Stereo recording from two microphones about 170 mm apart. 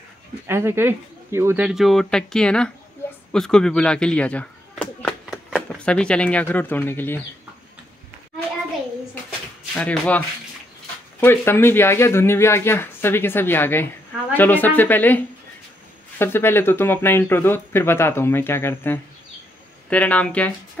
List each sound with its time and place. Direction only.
0.5 s speech: 15° right (ahead or behind)
1.7 s a man's voice: centre (ahead or behind)
9.8 s speech: 10° left (ahead or behind)